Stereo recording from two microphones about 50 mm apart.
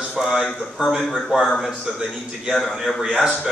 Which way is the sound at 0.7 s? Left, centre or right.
Centre.